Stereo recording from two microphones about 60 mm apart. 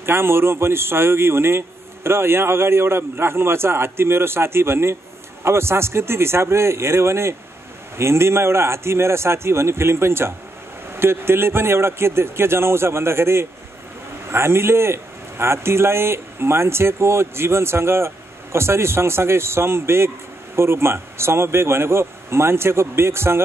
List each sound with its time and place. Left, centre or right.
0.0 s a man's voice: right